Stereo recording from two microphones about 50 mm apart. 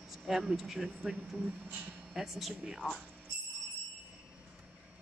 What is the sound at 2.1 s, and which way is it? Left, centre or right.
Speech, centre.